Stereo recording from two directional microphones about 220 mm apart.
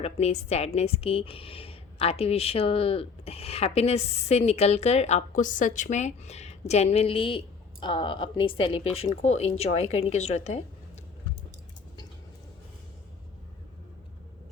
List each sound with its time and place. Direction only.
0.0 s a woman's voice: 30° left (ahead or behind)